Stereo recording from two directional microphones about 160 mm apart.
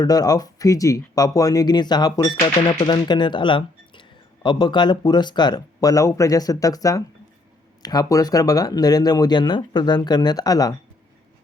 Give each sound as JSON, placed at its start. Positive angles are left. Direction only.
{"t": 0.0, "sound": "speech", "side_deg": 25}